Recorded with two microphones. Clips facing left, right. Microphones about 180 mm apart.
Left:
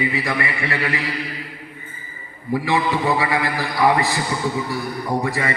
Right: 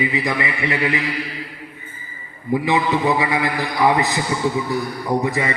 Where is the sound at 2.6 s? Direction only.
20° right (ahead or behind).